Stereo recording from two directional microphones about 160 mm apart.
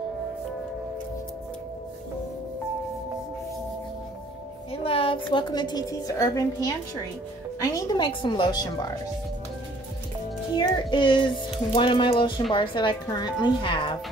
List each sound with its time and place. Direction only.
4.8 s a woman's voice: 35° left (ahead or behind)
10.5 s a woman's voice: 30° left (ahead or behind)